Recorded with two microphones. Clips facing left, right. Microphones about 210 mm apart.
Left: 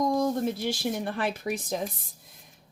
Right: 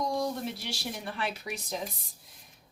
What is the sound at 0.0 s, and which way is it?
Speech, 45° left (ahead or behind).